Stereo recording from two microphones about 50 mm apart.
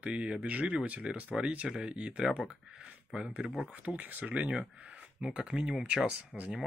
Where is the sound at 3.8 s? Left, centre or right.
Right.